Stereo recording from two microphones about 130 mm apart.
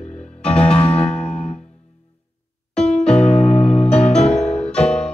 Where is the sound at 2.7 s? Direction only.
5° left (ahead or behind).